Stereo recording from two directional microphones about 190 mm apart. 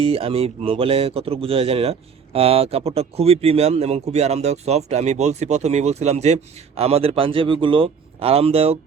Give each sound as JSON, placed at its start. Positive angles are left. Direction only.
{"t": 0.0, "sound": "speech", "side_deg": -30}